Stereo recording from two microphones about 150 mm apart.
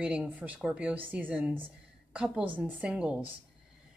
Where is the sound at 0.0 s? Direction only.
10° right (ahead or behind).